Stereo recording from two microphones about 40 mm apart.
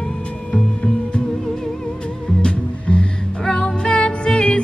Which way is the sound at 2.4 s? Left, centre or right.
Left.